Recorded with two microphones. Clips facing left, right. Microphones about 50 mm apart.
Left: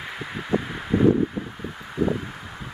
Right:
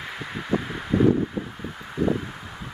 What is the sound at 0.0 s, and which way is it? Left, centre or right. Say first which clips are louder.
Rustling leaves: even; centre.